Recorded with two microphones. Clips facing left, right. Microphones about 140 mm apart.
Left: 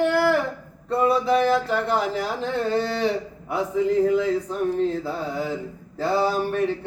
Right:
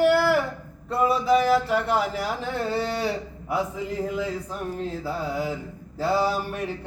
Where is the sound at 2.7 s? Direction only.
10° right (ahead or behind).